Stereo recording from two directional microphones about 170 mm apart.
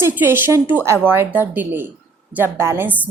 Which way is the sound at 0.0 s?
10° right (ahead or behind).